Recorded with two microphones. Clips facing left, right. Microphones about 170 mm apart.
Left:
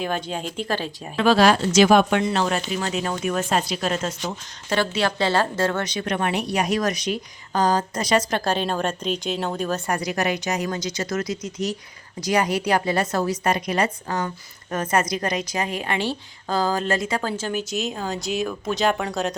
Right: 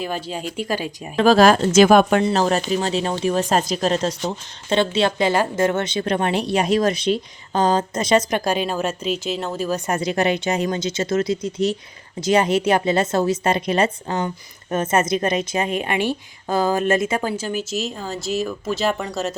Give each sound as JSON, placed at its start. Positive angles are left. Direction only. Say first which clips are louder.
{"t": 0.0, "sound": "speech", "louder": "even", "side_deg": -5}
{"t": 1.1, "sound": "speech", "louder": "right 4 dB", "side_deg": -40}
{"t": 3.6, "sound": "a woman's voice", "louder": "right 5 dB", "side_deg": -40}
{"t": 9.8, "sound": "a woman's voice", "louder": "right 4 dB", "side_deg": -25}